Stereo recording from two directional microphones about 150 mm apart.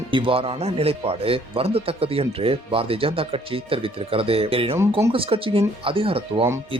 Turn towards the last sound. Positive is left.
turn(degrees=-40)  # may be behind; listen again after turning